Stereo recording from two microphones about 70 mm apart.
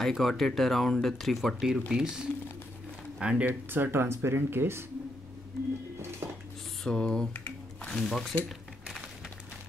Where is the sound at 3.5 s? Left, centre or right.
Right.